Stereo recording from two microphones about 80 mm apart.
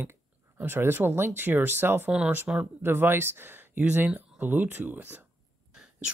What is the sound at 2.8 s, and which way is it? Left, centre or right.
Speech, right.